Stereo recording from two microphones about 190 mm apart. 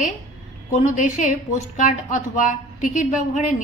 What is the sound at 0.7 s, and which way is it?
A woman's voice, 40° left (ahead or behind).